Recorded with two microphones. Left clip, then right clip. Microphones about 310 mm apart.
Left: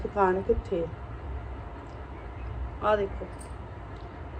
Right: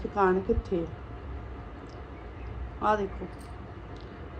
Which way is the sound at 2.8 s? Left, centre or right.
Centre.